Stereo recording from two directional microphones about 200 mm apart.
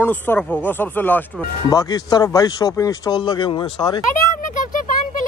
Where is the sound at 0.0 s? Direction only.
10° left (ahead or behind).